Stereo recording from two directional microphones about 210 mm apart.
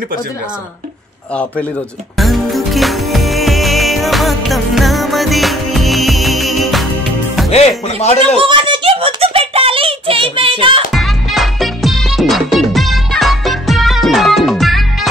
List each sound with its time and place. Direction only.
2.1 s music: centre (ahead or behind)
7.5 s speech: 30° left (ahead or behind)
8.4 s a sound: 25° right (ahead or behind)
10.9 s music: centre (ahead or behind)